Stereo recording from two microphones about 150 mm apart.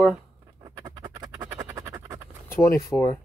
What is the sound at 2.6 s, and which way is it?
Speech, 20° left (ahead or behind).